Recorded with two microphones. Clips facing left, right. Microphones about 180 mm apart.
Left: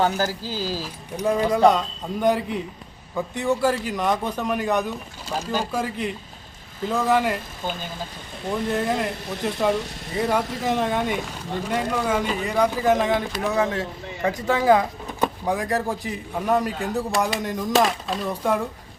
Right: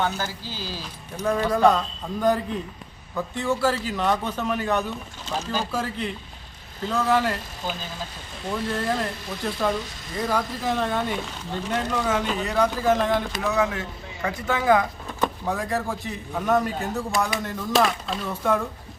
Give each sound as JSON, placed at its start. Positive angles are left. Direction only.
{"t": 0.2, "sound": "speech", "side_deg": 40}
{"t": 0.8, "sound": "a man's voice", "side_deg": 15}
{"t": 8.4, "sound": "a man's voice", "side_deg": 15}
{"t": 9.7, "sound": "speech", "side_deg": 65}
{"t": 10.7, "sound": "a man's voice", "side_deg": 15}
{"t": 13.5, "sound": "speech", "side_deg": 30}
{"t": 15.2, "sound": "a man's voice", "side_deg": 15}